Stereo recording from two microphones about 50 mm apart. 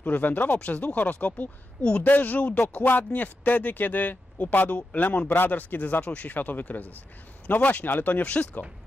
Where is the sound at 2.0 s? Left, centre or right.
Left.